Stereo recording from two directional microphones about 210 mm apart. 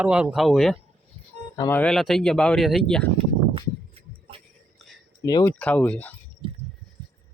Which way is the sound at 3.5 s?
25° right (ahead or behind).